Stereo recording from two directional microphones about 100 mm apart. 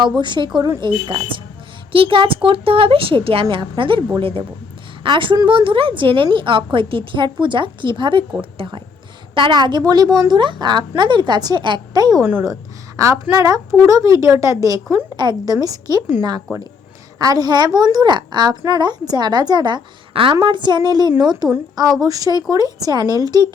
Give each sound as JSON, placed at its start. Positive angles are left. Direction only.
{"t": 0.2, "sound": "a woman's voice", "side_deg": -50}
{"t": 12.2, "sound": "a woman's voice", "side_deg": -20}
{"t": 13.0, "sound": "a woman's voice", "side_deg": -30}
{"t": 15.1, "sound": "a woman's voice", "side_deg": -45}
{"t": 17.2, "sound": "a woman's voice", "side_deg": -40}